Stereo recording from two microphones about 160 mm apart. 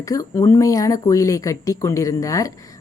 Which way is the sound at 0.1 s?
20° left (ahead or behind).